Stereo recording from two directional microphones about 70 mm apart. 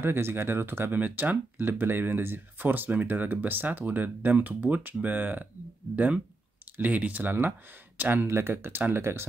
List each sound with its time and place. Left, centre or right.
0.0 s speech: right
0.9 s speech: right